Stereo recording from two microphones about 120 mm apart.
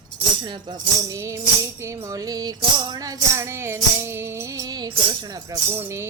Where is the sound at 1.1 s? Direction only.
25° right (ahead or behind).